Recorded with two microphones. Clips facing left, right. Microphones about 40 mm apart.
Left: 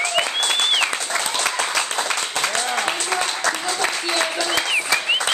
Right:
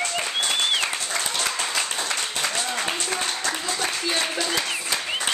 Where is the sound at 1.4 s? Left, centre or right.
Left.